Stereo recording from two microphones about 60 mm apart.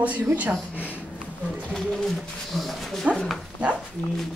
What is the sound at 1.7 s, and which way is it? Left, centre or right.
Pigeon, centre.